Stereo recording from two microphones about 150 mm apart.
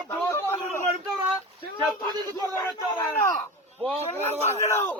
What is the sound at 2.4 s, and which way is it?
Battle cry, 20° left (ahead or behind).